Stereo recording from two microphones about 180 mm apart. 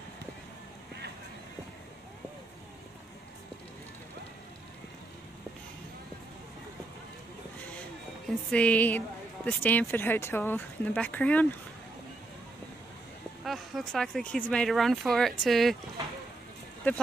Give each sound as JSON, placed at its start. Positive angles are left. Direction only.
{"t": 8.3, "sound": "a woman's voice", "side_deg": 5}
{"t": 13.4, "sound": "speech", "side_deg": 0}